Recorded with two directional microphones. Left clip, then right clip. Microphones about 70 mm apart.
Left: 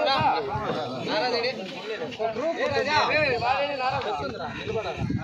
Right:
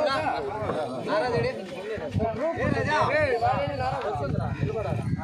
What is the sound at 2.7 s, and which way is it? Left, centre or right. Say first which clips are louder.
Speech: left 2 dB; right.